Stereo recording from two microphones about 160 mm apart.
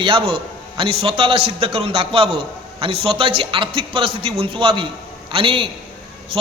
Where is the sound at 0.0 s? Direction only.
35° right (ahead or behind).